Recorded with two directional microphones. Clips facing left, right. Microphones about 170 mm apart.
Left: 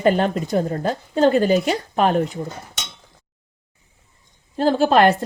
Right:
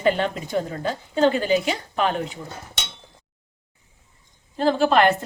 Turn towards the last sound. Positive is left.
turn(degrees=40)  # may be behind; listen again after turning